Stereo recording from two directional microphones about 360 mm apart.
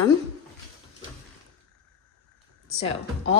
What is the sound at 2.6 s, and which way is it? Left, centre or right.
Music, centre.